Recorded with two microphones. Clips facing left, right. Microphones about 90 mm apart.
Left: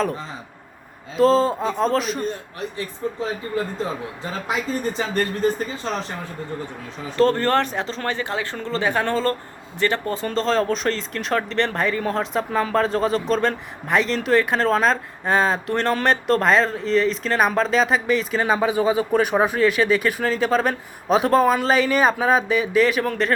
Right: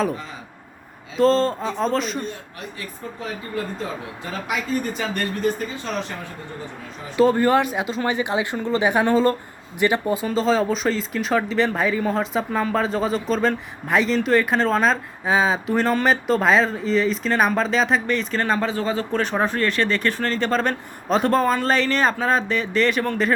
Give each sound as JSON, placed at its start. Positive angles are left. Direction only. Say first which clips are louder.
{"t": 1.1, "sound": "speech", "louder": "left 1 dB", "side_deg": 5}
{"t": 4.4, "sound": "speech", "louder": "even", "side_deg": 30}
{"t": 7.2, "sound": "speech", "louder": "right 1 dB", "side_deg": -10}